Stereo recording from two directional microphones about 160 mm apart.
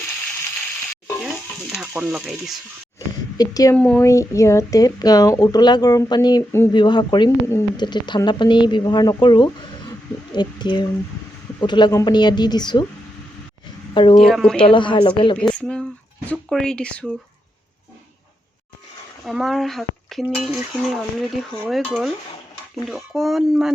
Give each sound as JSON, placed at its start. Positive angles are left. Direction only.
{"t": 2.0, "sound": "speech", "side_deg": 0}
{"t": 3.3, "sound": "speech", "side_deg": 25}
{"t": 3.8, "sound": "speech", "side_deg": 10}
{"t": 4.0, "sound": "speech", "side_deg": 20}
{"t": 13.9, "sound": "a woman's voice", "side_deg": 30}
{"t": 14.2, "sound": "speech", "side_deg": 0}
{"t": 14.5, "sound": "a woman's voice", "side_deg": 30}
{"t": 15.4, "sound": "speech", "side_deg": 5}
{"t": 19.2, "sound": "speech", "side_deg": 0}